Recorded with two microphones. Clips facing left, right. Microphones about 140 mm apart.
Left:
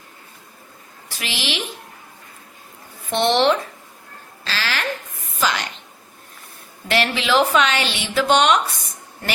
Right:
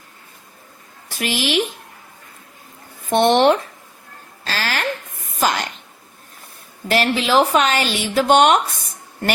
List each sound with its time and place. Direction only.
1.1 s speech: 50° right (ahead or behind)
3.1 s speech: 50° right (ahead or behind)
4.4 s a sound: 45° right (ahead or behind)
6.8 s speech: 40° right (ahead or behind)